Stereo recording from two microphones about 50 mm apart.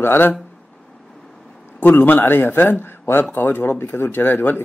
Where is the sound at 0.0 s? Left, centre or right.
Left.